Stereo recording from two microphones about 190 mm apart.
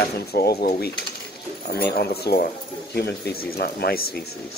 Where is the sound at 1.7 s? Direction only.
55° left (ahead or behind).